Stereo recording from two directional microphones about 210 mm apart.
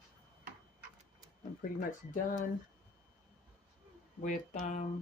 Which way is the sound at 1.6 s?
40° left (ahead or behind).